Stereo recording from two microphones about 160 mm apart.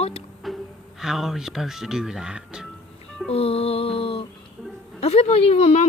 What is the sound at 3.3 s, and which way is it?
Music, 40° left (ahead or behind).